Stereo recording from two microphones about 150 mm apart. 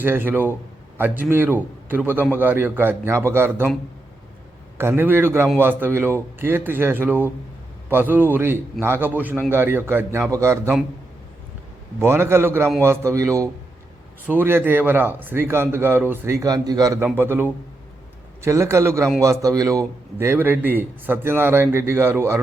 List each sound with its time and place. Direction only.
0.0 s a man's voice: 15° right (ahead or behind)
4.8 s a man's voice: 15° right (ahead or behind)
11.9 s a man's voice: 15° right (ahead or behind)